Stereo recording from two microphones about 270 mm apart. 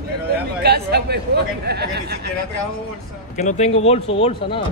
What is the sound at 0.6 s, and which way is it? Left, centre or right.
Speech, right.